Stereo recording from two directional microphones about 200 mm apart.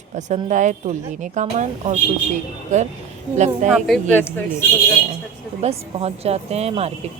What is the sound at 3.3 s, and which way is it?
Speech, 35° right (ahead or behind).